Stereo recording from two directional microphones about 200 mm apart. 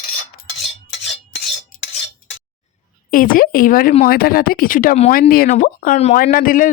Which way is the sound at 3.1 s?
45° left (ahead or behind).